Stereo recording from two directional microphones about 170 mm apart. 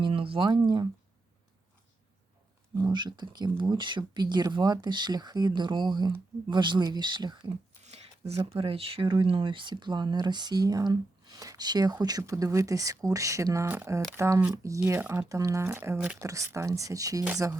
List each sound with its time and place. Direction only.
0.0 s speech: 30° right (ahead or behind)
2.9 s speech: 25° right (ahead or behind)